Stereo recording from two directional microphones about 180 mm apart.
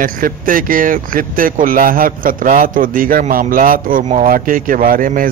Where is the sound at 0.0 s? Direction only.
50° right (ahead or behind).